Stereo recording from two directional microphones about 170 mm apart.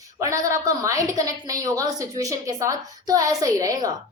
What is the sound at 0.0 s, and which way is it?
A woman's voice, 20° right (ahead or behind).